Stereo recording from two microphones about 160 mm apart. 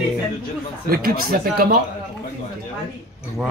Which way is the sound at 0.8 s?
65° right (ahead or behind).